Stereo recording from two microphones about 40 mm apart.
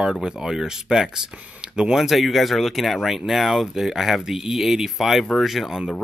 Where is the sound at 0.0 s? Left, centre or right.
Centre.